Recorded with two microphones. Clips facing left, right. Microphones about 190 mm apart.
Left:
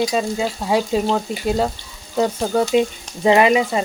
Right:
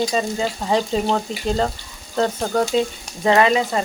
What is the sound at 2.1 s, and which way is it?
Speech, 5° left (ahead or behind).